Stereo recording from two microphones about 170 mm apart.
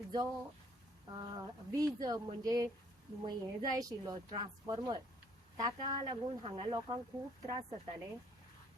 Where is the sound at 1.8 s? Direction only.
20° right (ahead or behind).